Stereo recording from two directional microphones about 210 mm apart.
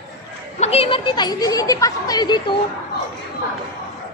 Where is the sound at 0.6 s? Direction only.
30° left (ahead or behind).